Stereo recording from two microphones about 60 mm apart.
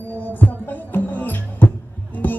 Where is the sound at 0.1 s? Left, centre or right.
Left.